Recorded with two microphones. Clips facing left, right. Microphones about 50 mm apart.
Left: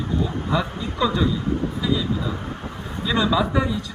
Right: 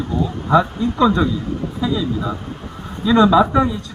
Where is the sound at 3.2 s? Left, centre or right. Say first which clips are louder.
Right 8 dB; right.